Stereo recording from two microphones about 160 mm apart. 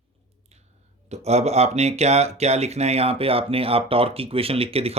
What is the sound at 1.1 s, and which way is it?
Speech, 40° right (ahead or behind).